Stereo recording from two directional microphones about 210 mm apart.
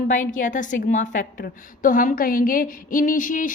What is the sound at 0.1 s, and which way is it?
A woman's voice, 40° left (ahead or behind).